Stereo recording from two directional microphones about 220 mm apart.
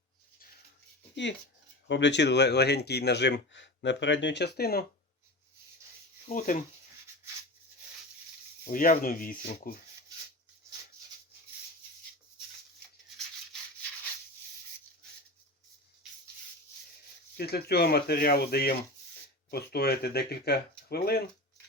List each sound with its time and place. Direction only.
1.1 s speech: 55° left (ahead or behind)
6.2 s speech: 35° left (ahead or behind)
8.6 s speech: 40° left (ahead or behind)
17.3 s speech: 45° left (ahead or behind)